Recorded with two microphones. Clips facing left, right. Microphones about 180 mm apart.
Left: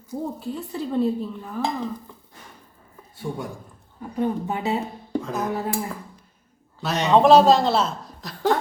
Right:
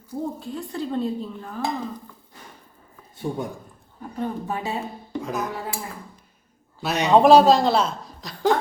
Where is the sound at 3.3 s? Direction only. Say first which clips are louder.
Right 2 dB; 20° right (ahead or behind).